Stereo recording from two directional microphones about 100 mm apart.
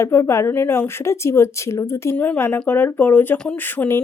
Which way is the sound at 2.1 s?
15° left (ahead or behind).